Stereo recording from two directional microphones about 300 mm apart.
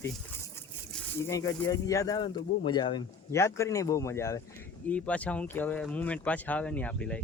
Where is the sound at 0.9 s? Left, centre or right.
Centre.